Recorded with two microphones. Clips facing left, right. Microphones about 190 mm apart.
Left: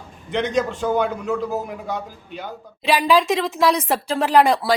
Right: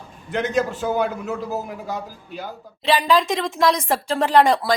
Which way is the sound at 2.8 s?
10° left (ahead or behind).